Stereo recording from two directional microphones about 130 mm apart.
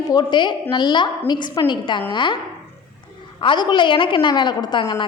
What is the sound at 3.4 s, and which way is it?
A woman's voice, 35° left (ahead or behind).